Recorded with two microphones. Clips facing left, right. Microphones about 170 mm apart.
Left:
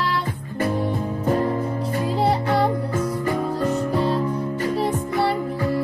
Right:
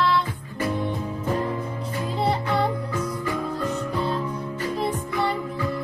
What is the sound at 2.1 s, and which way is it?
Music, 40° left (ahead or behind).